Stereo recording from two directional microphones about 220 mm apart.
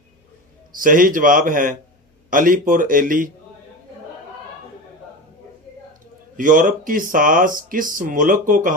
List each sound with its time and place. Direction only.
0.7 s speech: 40° right (ahead or behind)
6.3 s speech: 35° right (ahead or behind)